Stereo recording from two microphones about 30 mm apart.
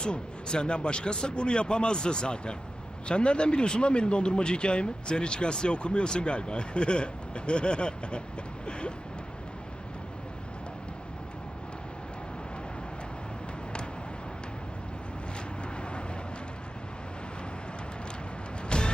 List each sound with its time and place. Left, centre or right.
0.0 s speech: left
15.8 s vehicle: left
18.7 s music: left